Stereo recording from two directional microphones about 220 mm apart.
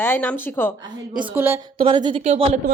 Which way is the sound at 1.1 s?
10° right (ahead or behind).